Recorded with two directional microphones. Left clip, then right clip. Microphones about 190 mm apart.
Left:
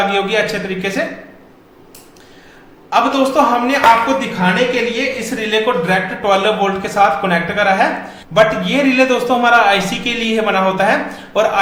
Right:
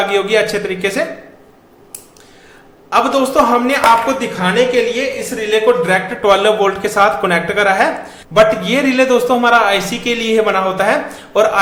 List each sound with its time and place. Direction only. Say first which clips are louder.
0.1 s a man's voice: right 2 dB; 15° right (ahead or behind)
2.9 s a man's voice: right 1 dB; 15° right (ahead or behind)